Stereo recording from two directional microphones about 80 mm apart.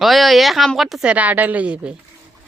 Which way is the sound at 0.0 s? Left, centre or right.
Centre.